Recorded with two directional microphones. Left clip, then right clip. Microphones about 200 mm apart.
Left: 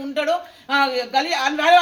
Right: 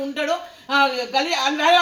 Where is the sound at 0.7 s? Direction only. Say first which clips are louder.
Even; 15° left (ahead or behind).